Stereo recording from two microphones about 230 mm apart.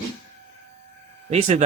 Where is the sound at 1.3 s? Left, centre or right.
Right.